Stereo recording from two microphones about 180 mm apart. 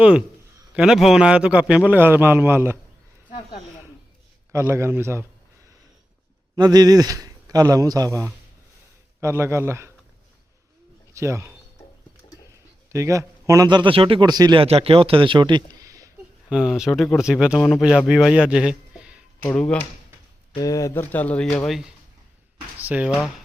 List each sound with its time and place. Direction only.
0.0 s a man's voice: 5° right (ahead or behind)
4.5 s a man's voice: 15° right (ahead or behind)
6.6 s a man's voice: 20° right (ahead or behind)
11.1 s speech: 15° right (ahead or behind)
12.9 s a man's voice: 15° right (ahead or behind)
16.5 s speech: 5° right (ahead or behind)
19.4 s speech: 5° left (ahead or behind)
20.5 s speech: 20° left (ahead or behind)
21.6 s speech: centre (ahead or behind)